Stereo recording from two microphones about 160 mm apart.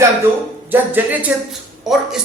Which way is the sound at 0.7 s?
10° right (ahead or behind).